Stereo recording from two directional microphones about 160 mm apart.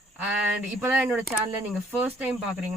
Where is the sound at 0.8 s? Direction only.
10° right (ahead or behind).